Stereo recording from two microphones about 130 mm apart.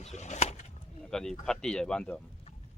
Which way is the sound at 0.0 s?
60° left (ahead or behind).